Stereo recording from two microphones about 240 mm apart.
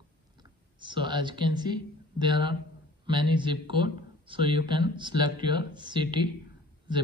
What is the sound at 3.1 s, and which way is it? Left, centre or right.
Speech, centre.